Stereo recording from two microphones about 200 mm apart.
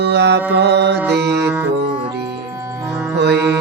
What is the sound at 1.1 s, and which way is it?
Music, 55° right (ahead or behind).